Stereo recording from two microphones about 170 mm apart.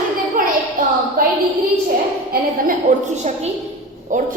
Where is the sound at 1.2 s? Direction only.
55° right (ahead or behind).